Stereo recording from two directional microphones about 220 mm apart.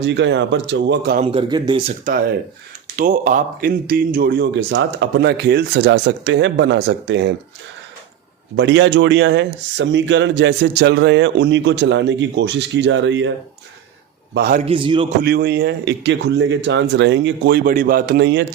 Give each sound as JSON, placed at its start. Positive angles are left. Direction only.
{"t": 0.0, "sound": "speech", "side_deg": -50}
{"t": 1.2, "sound": "a man's voice", "side_deg": -25}
{"t": 2.0, "sound": "a man's voice", "side_deg": -40}
{"t": 8.5, "sound": "speech", "side_deg": -55}
{"t": 14.3, "sound": "speech", "side_deg": -45}
{"t": 14.6, "sound": "a man's voice", "side_deg": -25}
{"t": 15.2, "sound": "speech", "side_deg": -45}
{"t": 17.6, "sound": "a man's voice", "side_deg": -40}